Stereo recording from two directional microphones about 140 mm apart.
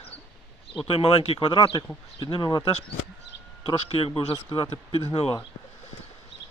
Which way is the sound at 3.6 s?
40° left (ahead or behind).